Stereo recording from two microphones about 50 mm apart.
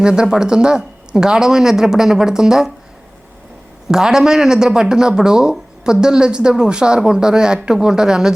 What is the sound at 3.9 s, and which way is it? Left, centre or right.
Speech, centre.